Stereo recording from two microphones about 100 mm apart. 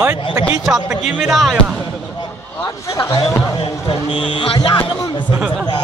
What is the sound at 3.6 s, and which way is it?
Speech, 55° left (ahead or behind).